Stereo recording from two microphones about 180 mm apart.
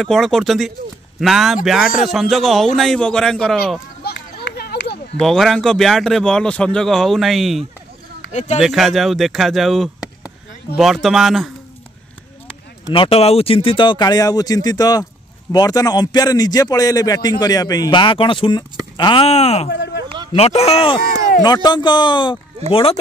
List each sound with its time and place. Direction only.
0.0 s a man's voice: centre (ahead or behind)
4.0 s a sound: 60° left (ahead or behind)
5.2 s a man's voice: centre (ahead or behind)
8.3 s speech: 40° left (ahead or behind)
8.5 s a man's voice: centre (ahead or behind)
12.9 s a man's voice: 30° left (ahead or behind)
19.7 s a sound: 75° left (ahead or behind)
20.3 s a man's voice: 35° left (ahead or behind)